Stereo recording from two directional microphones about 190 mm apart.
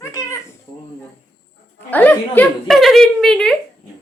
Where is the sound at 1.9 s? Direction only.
10° left (ahead or behind).